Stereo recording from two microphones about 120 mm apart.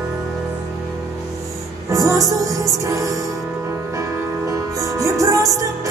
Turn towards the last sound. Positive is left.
turn(degrees=-30)  # may be behind; listen again after turning